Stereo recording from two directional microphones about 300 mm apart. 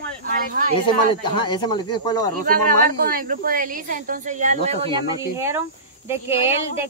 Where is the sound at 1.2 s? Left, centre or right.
Centre.